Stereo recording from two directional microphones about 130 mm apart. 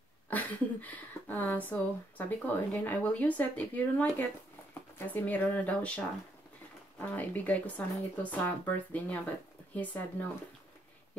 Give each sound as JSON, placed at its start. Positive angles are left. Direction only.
{"t": 0.3, "sound": "speech", "side_deg": 10}